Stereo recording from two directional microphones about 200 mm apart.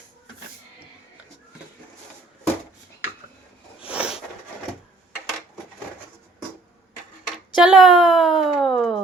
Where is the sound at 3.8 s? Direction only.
5° right (ahead or behind).